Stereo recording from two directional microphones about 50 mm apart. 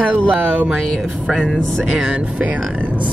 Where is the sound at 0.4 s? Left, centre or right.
Right.